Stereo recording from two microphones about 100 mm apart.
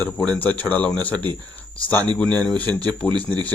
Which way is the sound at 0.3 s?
15° left (ahead or behind).